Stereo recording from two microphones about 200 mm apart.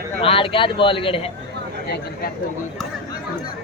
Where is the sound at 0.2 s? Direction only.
25° left (ahead or behind).